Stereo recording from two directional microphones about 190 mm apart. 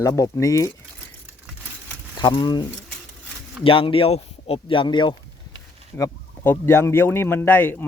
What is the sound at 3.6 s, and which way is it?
Speech, 30° left (ahead or behind).